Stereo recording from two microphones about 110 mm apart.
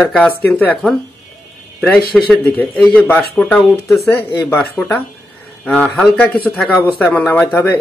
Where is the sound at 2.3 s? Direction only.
15° left (ahead or behind).